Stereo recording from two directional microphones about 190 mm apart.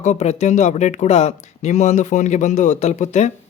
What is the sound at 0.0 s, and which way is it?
Speech, 35° left (ahead or behind).